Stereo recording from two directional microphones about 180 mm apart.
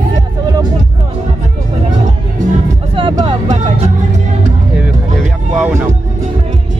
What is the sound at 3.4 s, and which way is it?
Music, 40° right (ahead or behind).